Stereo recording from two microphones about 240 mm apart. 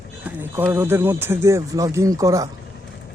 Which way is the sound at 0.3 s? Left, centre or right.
Centre.